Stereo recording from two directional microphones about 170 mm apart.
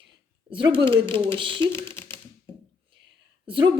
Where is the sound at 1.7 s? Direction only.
15° left (ahead or behind).